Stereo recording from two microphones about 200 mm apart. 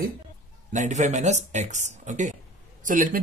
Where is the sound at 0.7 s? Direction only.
35° right (ahead or behind).